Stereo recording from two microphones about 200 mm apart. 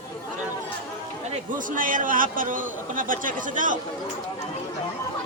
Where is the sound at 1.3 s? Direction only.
40° right (ahead or behind).